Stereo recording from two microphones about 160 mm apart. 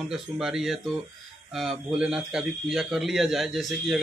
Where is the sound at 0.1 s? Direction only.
Centre (ahead or behind).